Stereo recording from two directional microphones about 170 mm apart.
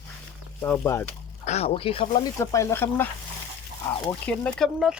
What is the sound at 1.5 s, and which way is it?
Speech, 35° left (ahead or behind).